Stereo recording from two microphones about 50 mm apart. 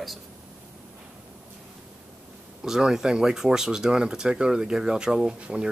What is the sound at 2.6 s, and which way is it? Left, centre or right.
Speech, centre.